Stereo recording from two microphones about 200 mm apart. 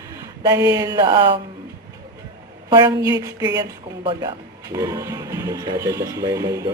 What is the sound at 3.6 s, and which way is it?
Speech, 25° right (ahead or behind).